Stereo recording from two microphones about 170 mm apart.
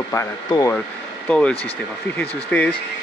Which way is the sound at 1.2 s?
5° left (ahead or behind).